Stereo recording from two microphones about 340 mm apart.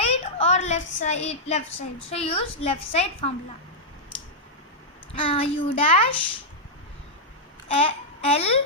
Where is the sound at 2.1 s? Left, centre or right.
Centre.